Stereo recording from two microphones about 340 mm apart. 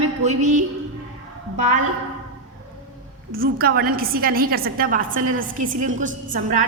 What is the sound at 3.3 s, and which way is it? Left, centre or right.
A woman's voice, right.